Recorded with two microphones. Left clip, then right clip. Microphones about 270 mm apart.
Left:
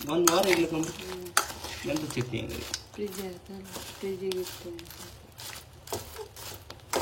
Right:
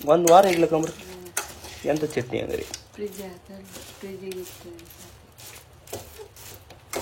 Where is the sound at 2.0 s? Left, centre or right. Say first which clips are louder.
Right 7 dB; centre.